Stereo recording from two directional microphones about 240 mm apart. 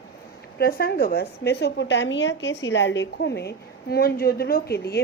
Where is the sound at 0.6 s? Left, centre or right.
Left.